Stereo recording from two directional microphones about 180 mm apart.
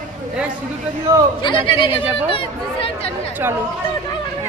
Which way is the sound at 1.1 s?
20° right (ahead or behind).